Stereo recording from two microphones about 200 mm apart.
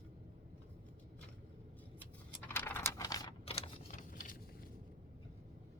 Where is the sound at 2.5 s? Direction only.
10° left (ahead or behind); by 3.7 s 30° left (ahead or behind).